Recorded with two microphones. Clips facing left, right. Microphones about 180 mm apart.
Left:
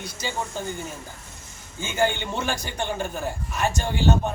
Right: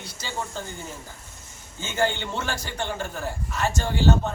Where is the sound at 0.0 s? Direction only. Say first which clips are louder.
Left 3 dB; 15° left (ahead or behind).